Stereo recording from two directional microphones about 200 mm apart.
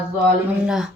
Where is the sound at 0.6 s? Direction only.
Centre (ahead or behind).